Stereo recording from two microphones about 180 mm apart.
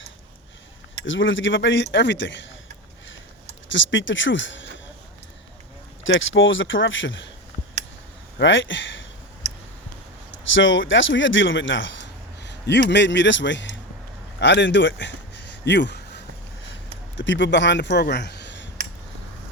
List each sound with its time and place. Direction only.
1.0 s a man's voice: 90° left
3.7 s a man's voice: 90° left
6.0 s a man's voice: 90° left
8.4 s a man's voice: 90° left
10.5 s speech: 90° left
14.3 s a sound: 80° left
17.2 s speech: 90° left